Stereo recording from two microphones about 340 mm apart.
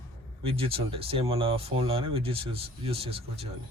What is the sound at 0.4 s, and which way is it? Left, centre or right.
Speech, centre.